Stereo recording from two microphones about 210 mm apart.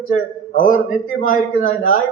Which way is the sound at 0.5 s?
40° left (ahead or behind).